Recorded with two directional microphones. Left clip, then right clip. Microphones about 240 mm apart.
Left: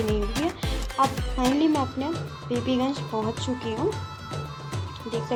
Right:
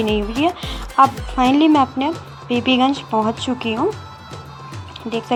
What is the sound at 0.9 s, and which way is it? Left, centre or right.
Speech, right.